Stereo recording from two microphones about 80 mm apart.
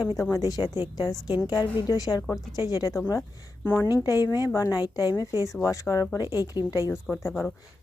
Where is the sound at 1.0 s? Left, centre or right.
Left.